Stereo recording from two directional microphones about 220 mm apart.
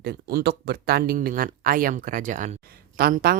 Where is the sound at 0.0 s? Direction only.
45° right (ahead or behind).